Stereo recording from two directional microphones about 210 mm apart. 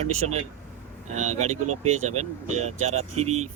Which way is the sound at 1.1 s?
35° right (ahead or behind).